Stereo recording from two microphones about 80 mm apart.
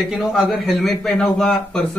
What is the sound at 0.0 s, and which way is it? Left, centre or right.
A man's voice, centre.